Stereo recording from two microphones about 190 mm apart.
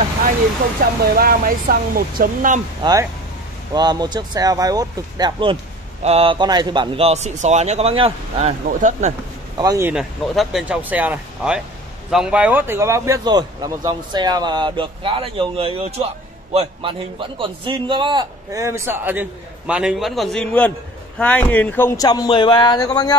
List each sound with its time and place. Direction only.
0.7 s speech: 50° right (ahead or behind)
2.8 s a man's voice: 20° right (ahead or behind); by 9.1 s 40° right (ahead or behind)
9.6 s a man's voice: 15° right (ahead or behind); by 23.1 s 20° left (ahead or behind)